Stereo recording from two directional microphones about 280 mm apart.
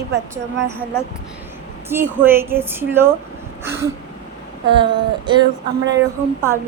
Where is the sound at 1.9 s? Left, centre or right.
Centre.